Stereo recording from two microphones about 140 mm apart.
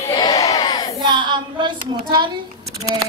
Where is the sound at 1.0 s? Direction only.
35° right (ahead or behind).